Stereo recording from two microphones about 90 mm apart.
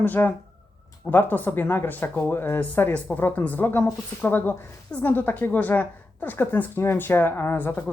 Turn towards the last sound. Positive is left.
turn(degrees=20)  # may be behind; listen again after turning